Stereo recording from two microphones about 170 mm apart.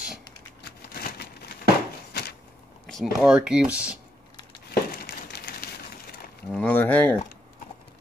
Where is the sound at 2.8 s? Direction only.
Centre (ahead or behind).